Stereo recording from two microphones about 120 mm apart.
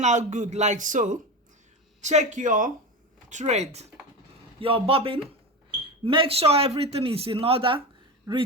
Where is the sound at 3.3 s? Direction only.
75° right (ahead or behind).